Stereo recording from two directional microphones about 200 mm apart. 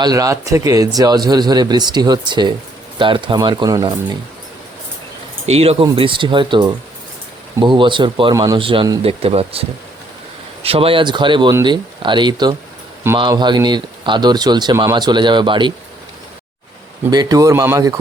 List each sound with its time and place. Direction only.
0.0 s speech: 20° right (ahead or behind)
5.5 s speech: 30° right (ahead or behind)
17.1 s speech: 20° right (ahead or behind)